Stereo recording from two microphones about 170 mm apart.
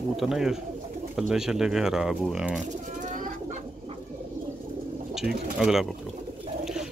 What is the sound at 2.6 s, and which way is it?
Bird, 45° right (ahead or behind).